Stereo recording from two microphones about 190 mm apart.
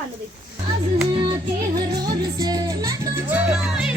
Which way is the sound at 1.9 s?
20° right (ahead or behind).